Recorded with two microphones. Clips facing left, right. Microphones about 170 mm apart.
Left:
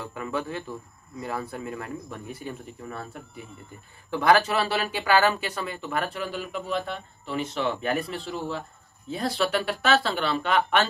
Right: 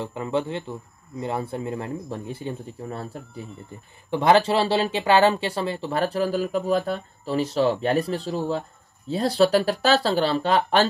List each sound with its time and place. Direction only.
0.0 s speech: 25° right (ahead or behind)